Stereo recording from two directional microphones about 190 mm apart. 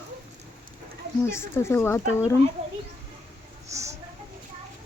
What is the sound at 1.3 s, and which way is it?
Speech, 15° left (ahead or behind).